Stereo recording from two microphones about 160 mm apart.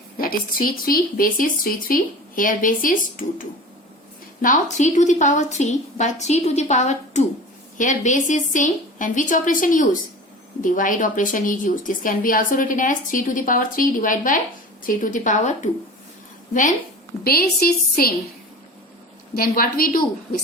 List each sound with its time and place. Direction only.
0.2 s a woman's voice: 65° left (ahead or behind)
17.2 s a woman's voice: 70° left (ahead or behind)
19.4 s a woman's voice: 65° left (ahead or behind)